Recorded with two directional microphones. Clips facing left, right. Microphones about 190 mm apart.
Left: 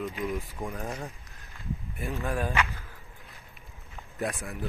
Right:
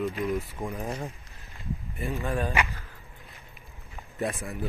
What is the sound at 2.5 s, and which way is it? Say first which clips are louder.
Speech: right 1 dB; 15° right (ahead or behind).